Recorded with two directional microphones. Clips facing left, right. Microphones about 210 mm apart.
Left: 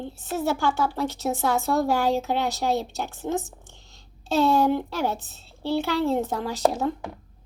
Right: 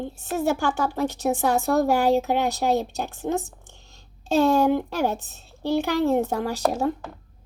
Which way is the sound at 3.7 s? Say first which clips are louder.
Right 1 dB; 15° left (ahead or behind).